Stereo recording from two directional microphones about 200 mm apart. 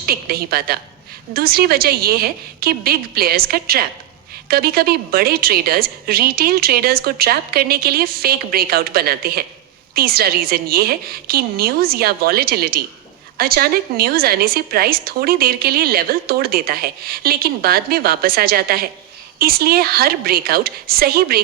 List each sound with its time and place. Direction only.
0.0 s a woman's voice: 50° right (ahead or behind)